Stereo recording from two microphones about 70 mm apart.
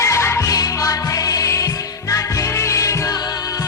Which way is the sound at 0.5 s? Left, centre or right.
Left.